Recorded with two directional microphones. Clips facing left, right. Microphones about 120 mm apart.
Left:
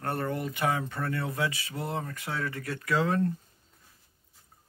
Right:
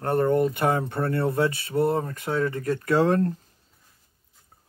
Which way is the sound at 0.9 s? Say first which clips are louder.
Right 7 dB; 35° right (ahead or behind).